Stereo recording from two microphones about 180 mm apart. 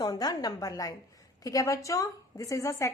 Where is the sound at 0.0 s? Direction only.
20° left (ahead or behind).